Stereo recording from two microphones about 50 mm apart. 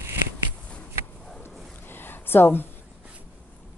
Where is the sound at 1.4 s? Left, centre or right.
Left.